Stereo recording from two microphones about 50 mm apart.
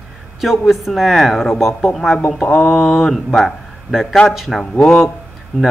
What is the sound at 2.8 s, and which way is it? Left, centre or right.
Speech, centre.